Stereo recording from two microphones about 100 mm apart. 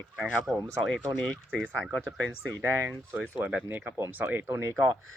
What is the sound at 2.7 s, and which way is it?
Speech, 20° right (ahead or behind).